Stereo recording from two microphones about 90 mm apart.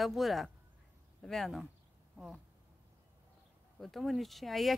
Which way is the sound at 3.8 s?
Centre (ahead or behind).